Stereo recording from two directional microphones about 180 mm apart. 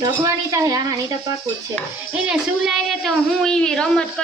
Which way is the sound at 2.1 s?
5° right (ahead or behind).